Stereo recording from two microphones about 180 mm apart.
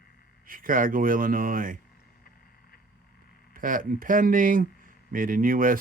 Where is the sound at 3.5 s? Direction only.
50° right (ahead or behind).